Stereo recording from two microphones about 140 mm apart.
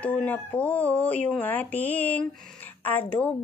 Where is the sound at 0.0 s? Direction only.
10° left (ahead or behind).